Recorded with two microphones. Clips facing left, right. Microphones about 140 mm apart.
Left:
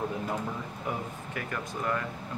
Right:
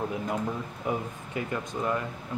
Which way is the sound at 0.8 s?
20° right (ahead or behind).